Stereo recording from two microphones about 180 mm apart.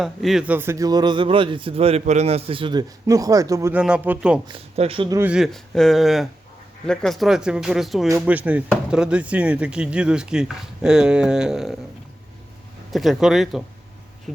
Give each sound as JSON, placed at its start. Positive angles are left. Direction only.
{"t": 0.0, "sound": "a man's voice", "side_deg": 0}
{"t": 4.4, "sound": "a man's voice", "side_deg": -30}
{"t": 5.1, "sound": "speech", "side_deg": -10}
{"t": 8.0, "sound": "speech", "side_deg": -10}
{"t": 12.9, "sound": "speech", "side_deg": 0}